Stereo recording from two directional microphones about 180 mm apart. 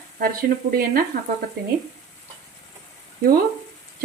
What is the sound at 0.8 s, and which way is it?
Speech, 55° right (ahead or behind).